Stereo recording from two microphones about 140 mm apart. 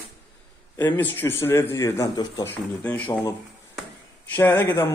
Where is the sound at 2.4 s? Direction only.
10° left (ahead or behind).